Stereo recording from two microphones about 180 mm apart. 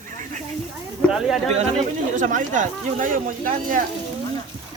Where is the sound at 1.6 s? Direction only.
40° right (ahead or behind).